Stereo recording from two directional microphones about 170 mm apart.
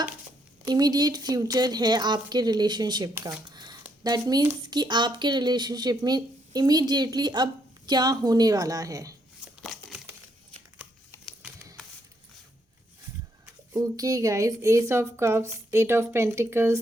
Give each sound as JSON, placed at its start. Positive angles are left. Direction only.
{"t": 0.7, "sound": "a woman's voice", "side_deg": -25}
{"t": 9.7, "sound": "a sound", "side_deg": 0}
{"t": 13.4, "sound": "speech", "side_deg": -20}